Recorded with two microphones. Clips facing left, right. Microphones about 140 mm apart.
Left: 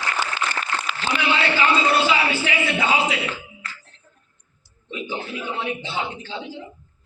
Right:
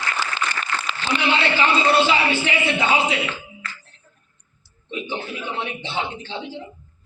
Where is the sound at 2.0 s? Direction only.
25° right (ahead or behind).